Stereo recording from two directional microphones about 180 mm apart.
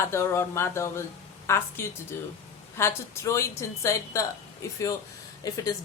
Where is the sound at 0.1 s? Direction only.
15° left (ahead or behind).